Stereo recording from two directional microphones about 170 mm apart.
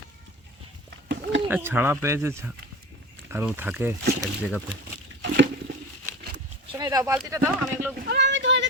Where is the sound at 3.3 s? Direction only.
10° right (ahead or behind).